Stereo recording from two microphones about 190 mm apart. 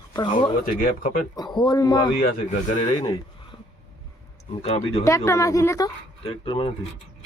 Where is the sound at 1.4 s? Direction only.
25° left (ahead or behind).